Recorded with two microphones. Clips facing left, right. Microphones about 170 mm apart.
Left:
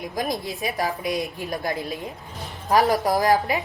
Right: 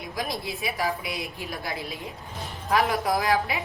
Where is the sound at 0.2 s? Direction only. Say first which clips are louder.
Left 4 dB; 45° left (ahead or behind).